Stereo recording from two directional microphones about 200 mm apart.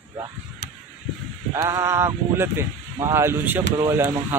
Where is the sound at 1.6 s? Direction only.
15° right (ahead or behind).